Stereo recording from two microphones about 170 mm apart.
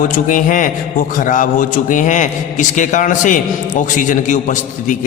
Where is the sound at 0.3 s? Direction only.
50° left (ahead or behind).